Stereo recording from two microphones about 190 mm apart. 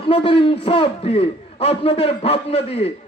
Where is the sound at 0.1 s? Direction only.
30° left (ahead or behind).